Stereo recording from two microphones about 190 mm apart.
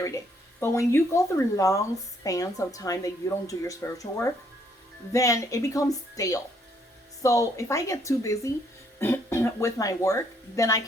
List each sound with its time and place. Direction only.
0.6 s speech: 15° left (ahead or behind)